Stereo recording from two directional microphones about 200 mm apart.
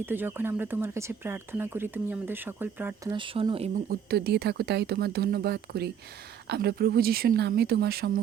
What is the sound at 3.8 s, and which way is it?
A woman's voice, 50° right (ahead or behind).